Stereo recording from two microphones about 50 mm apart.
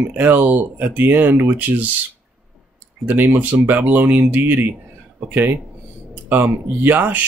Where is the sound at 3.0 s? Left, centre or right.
Right.